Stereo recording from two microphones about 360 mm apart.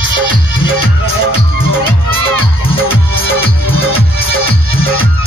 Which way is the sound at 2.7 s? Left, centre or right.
Centre.